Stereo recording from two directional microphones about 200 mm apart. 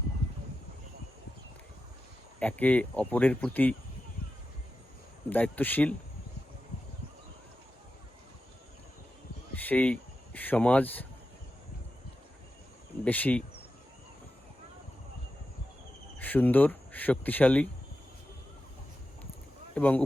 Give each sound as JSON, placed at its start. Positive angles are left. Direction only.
{"t": 2.4, "sound": "speech", "side_deg": 5}
{"t": 5.3, "sound": "speech", "side_deg": 10}
{"t": 9.6, "sound": "speech", "side_deg": 5}
{"t": 13.1, "sound": "speech", "side_deg": 10}
{"t": 16.1, "sound": "speech", "side_deg": 10}
{"t": 19.7, "sound": "speech", "side_deg": 10}